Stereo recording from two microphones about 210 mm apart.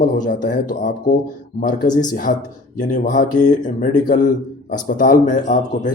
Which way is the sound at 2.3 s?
40° left (ahead or behind).